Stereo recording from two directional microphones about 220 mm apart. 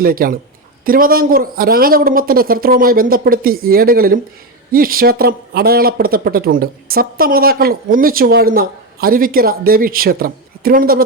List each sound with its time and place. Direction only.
0.0 s speech: 40° right (ahead or behind)